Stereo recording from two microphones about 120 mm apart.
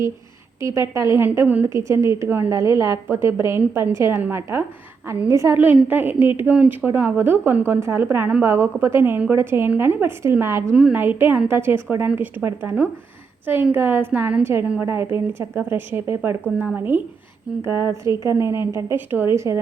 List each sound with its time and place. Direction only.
0.6 s a woman's voice: 25° right (ahead or behind)